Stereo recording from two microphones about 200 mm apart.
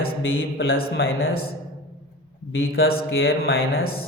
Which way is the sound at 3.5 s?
90° left.